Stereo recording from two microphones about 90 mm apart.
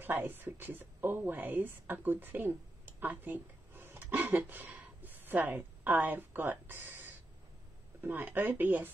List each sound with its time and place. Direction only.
0.0 s speech: 20° right (ahead or behind)
3.0 s a sound: 20° right (ahead or behind)
4.5 s a woman's voice: 20° right (ahead or behind)